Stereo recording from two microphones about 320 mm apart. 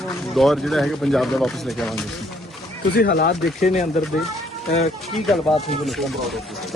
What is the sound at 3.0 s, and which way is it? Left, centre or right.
Speech, left.